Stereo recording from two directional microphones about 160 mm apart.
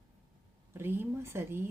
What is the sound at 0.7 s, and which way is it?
Speech, 15° right (ahead or behind).